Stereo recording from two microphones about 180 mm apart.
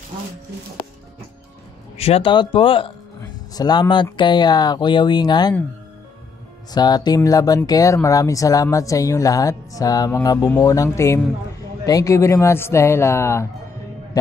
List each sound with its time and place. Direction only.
2.0 s speech: 35° left (ahead or behind)
6.7 s speech: 25° left (ahead or behind)